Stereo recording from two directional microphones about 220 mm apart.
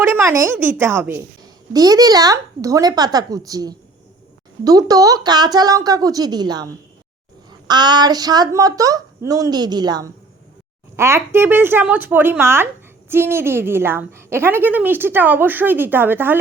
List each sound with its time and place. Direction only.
0.0 s a woman's voice: 10° right (ahead or behind)
7.7 s a woman's voice: 20° right (ahead or behind)